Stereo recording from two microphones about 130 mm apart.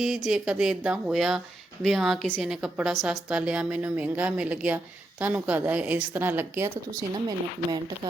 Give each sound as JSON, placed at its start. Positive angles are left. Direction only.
{"t": 0.3, "sound": "a woman's voice", "side_deg": -5}
{"t": 6.9, "sound": "speech", "side_deg": -30}